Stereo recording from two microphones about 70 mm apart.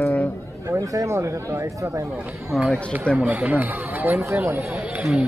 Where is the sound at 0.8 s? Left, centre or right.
Right.